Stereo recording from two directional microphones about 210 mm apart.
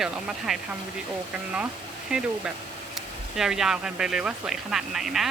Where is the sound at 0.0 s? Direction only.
Centre (ahead or behind).